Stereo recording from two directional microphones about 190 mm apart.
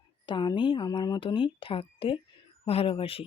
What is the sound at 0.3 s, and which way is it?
Speech, 25° left (ahead or behind).